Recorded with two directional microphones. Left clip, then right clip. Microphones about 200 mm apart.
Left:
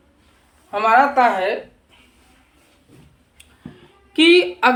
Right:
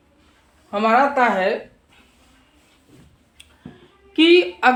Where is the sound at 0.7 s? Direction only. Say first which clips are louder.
Left 2 dB; 25° right (ahead or behind).